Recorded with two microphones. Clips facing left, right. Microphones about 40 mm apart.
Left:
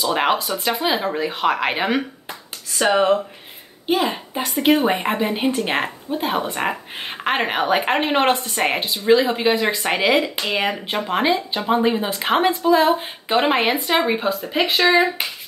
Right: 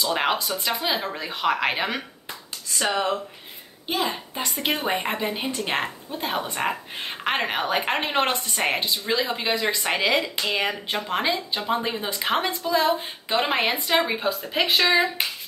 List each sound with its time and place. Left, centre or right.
0.0 s a woman's voice: centre
3.8 s a woman's voice: centre
7.3 s a woman's voice: left
14.8 s speech: left